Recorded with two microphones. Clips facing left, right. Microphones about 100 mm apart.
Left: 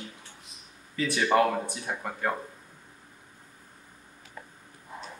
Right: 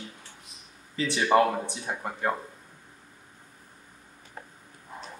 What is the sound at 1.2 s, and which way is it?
Speech, 15° right (ahead or behind).